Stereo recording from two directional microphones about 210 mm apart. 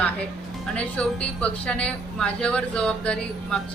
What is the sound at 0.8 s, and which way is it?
A woman's voice, 5° left (ahead or behind).